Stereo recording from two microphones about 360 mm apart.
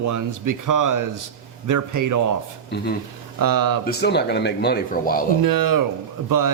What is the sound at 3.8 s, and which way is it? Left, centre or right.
Speech, left.